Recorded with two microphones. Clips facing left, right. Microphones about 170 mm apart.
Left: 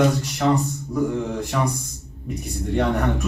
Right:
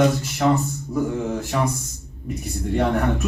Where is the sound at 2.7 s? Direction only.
Centre (ahead or behind).